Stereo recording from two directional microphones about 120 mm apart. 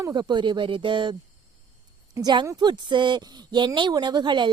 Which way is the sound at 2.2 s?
40° right (ahead or behind).